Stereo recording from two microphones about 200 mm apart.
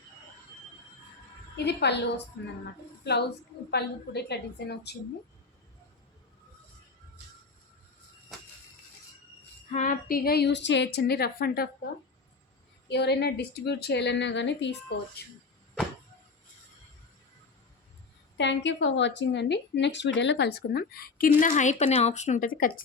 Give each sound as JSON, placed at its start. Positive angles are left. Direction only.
{"t": 1.5, "sound": "a woman's voice", "side_deg": 60}
{"t": 9.7, "sound": "a woman's voice", "side_deg": 40}
{"t": 12.9, "sound": "a woman's voice", "side_deg": 55}
{"t": 18.3, "sound": "a woman's voice", "side_deg": 65}